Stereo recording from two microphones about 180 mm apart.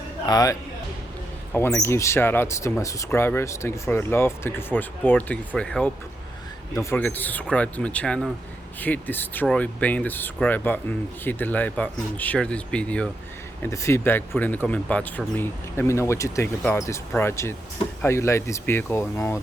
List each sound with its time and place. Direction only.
0.3 s speech: 20° left (ahead or behind)
1.5 s speech: 15° left (ahead or behind)